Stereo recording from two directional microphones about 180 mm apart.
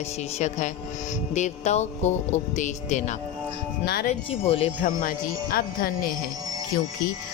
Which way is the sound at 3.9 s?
60° left (ahead or behind).